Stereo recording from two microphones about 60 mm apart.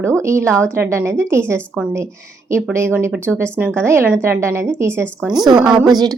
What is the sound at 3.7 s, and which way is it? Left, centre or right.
A woman's voice, right.